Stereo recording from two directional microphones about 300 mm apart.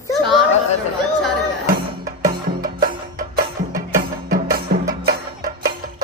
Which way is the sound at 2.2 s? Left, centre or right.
Right.